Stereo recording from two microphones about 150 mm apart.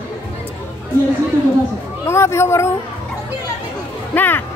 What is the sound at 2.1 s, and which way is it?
Speech, 15° left (ahead or behind).